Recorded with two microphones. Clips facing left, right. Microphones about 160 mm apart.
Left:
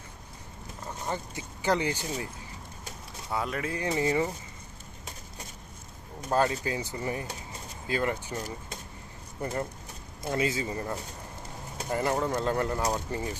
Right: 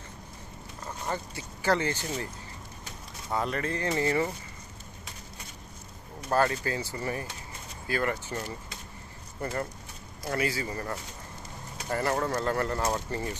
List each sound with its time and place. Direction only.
0.9 s speech: 15° left (ahead or behind)
3.3 s speech: 5° left (ahead or behind)
6.3 s a man's voice: 15° left (ahead or behind)